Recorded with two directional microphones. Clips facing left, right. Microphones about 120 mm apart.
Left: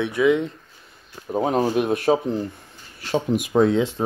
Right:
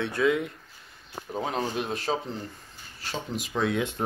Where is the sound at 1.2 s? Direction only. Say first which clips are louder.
Left 9 dB; 40° left (ahead or behind); by 2.1 s 55° left (ahead or behind).